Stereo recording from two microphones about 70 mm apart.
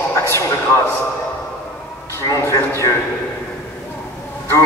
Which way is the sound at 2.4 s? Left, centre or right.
Left.